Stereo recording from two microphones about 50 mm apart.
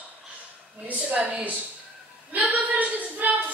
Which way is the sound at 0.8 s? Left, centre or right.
Right.